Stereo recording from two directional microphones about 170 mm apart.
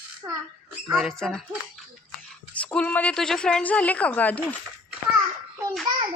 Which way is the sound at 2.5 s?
5° left (ahead or behind).